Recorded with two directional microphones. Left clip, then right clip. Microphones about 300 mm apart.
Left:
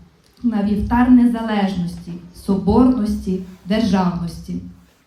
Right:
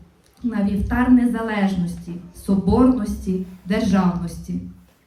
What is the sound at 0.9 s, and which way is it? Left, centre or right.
A woman's voice, centre.